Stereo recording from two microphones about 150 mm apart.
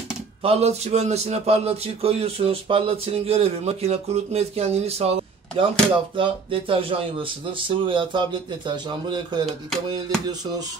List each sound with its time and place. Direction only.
0.4 s a man's voice: 45° right (ahead or behind)
6.1 s speech: 35° right (ahead or behind)
9.8 s music: 25° right (ahead or behind)